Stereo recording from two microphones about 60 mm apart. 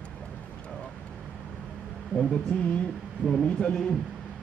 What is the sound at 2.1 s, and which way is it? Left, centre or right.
Speech, centre.